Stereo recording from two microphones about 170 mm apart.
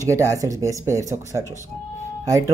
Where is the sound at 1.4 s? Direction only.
20° left (ahead or behind).